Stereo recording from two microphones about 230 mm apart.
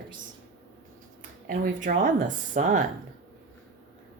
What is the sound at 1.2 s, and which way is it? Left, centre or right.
Speech, right.